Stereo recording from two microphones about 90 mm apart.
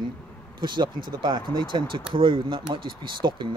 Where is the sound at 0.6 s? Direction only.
60° right (ahead or behind).